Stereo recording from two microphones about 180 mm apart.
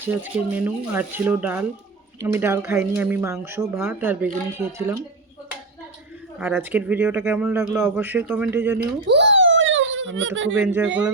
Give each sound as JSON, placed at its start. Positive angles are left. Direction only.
{"t": 0.0, "sound": "a man's voice", "side_deg": -10}
{"t": 6.4, "sound": "a man's voice", "side_deg": -10}
{"t": 8.8, "sound": "a sound", "side_deg": -75}
{"t": 10.6, "sound": "a man's voice", "side_deg": -10}